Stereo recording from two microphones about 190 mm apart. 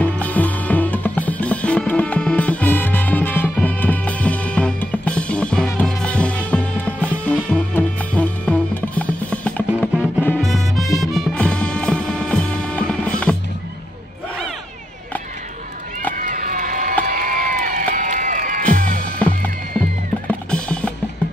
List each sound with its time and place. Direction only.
0.0 s music: 10° left (ahead or behind)
16.2 s run: 45° right (ahead or behind)
17.0 s crowd: 50° right (ahead or behind)
18.8 s music: 50° right (ahead or behind)
19.1 s music: 5° left (ahead or behind)